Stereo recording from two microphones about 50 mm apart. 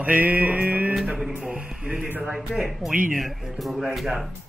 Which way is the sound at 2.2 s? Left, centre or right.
Centre.